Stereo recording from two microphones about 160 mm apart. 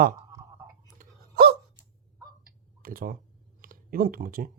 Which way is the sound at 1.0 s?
75° right (ahead or behind).